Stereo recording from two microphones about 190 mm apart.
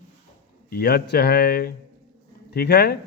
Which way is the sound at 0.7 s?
55° left (ahead or behind).